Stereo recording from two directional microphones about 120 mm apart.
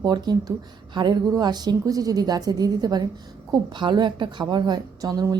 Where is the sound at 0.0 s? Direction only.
35° right (ahead or behind).